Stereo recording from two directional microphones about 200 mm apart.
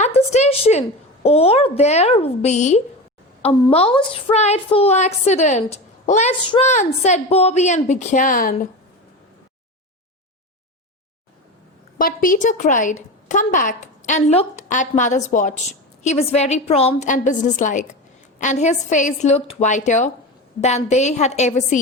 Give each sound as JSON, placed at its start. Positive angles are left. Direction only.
{"t": 0.0, "sound": "a woman's voice", "side_deg": 30}
{"t": 11.9, "sound": "a woman's voice", "side_deg": 45}